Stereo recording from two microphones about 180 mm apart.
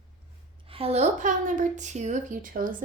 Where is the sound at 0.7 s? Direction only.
30° right (ahead or behind).